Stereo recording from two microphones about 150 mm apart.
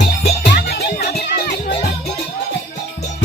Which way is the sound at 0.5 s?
90° left.